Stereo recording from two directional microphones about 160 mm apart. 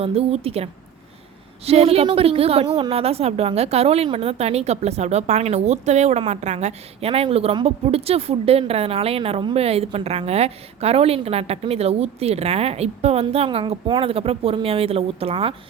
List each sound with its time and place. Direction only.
0.0 s a woman's voice: 40° right (ahead or behind)